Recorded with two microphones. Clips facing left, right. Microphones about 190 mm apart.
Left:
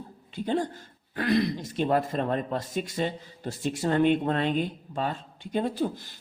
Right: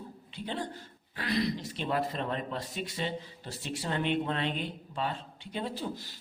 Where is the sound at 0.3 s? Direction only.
45° left (ahead or behind).